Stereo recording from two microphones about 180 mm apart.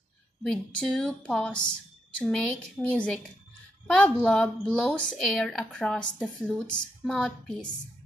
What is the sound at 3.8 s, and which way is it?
A woman's voice, 5° left (ahead or behind).